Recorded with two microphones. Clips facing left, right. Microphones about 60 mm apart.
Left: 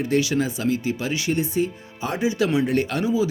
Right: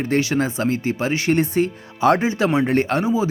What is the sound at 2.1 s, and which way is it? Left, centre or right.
Speech, right.